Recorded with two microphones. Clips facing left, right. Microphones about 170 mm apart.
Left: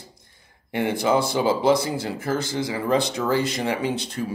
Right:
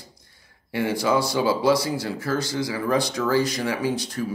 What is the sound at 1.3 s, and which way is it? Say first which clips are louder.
Speech: left 1 dB; 20° left (ahead or behind).